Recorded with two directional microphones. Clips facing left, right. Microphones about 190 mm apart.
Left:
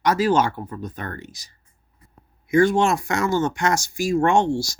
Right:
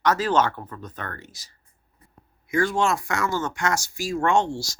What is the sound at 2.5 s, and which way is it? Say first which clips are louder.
Speech: left 5 dB; 15° left (ahead or behind).